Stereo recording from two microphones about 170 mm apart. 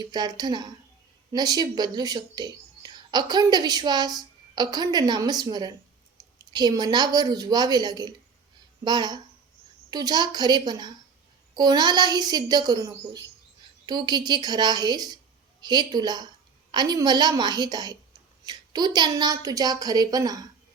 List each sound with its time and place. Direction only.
0.0 s speech: 25° right (ahead or behind)